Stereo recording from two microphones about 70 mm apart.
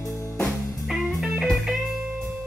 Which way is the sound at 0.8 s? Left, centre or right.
Centre.